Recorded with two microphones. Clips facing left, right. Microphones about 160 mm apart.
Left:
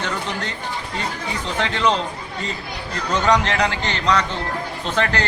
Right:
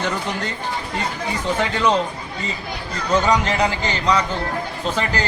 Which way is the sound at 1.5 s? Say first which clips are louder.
Even; 10° right (ahead or behind).